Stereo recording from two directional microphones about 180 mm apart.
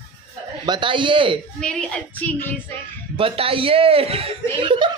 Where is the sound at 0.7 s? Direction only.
25° right (ahead or behind).